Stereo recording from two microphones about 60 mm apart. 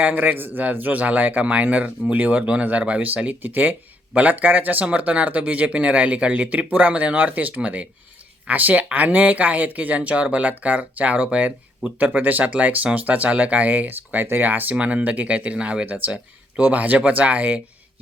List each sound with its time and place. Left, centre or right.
0.0 s speech: right